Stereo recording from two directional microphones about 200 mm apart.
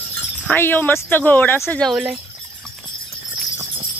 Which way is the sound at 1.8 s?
Centre (ahead or behind).